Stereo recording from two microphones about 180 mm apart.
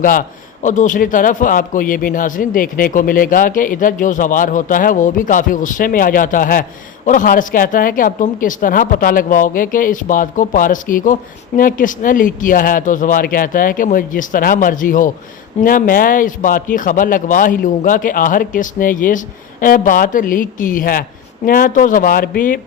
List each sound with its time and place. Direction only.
0.0 s a man's voice: 50° left (ahead or behind)